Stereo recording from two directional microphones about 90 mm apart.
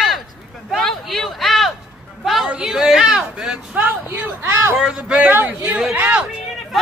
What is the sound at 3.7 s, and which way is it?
Speech, 20° right (ahead or behind).